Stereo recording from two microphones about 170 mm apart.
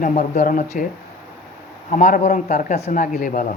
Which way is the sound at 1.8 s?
50° left (ahead or behind).